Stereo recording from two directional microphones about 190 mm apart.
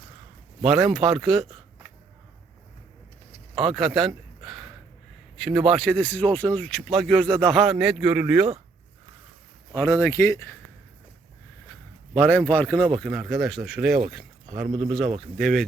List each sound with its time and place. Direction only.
0.6 s speech: centre (ahead or behind)
3.5 s speech: centre (ahead or behind)
9.7 s speech: 15° left (ahead or behind)
12.1 s speech: 5° left (ahead or behind)